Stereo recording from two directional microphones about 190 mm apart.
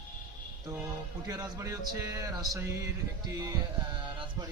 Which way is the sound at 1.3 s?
15° right (ahead or behind).